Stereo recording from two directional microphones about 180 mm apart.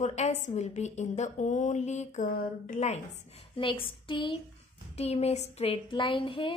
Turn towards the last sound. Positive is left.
turn(degrees=30)  # may be behind; listen again after turning